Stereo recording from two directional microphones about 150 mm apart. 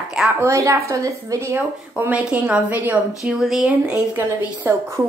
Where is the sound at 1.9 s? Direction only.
10° right (ahead or behind).